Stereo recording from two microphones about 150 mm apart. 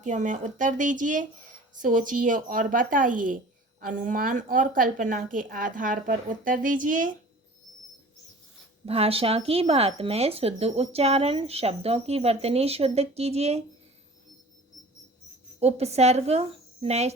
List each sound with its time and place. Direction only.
0.0 s a woman's voice: 55° right (ahead or behind)
8.9 s speech: 40° right (ahead or behind)
15.6 s speech: 45° right (ahead or behind)